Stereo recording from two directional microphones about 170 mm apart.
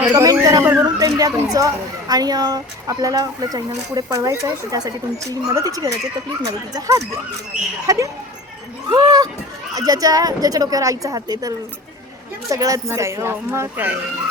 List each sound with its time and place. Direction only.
0.0 s speech: 20° right (ahead or behind)